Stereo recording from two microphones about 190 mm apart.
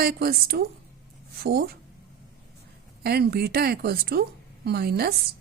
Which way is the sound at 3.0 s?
55° right (ahead or behind).